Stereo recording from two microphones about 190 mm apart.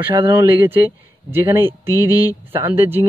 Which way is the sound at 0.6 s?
10° right (ahead or behind).